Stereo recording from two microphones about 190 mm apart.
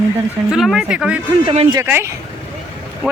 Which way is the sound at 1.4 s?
30° right (ahead or behind).